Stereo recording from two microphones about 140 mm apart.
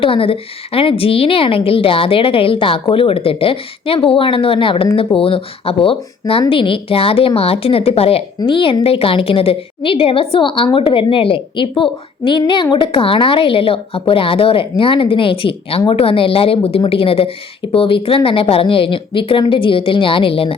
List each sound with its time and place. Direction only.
0.0 s a woman's voice: 40° left (ahead or behind)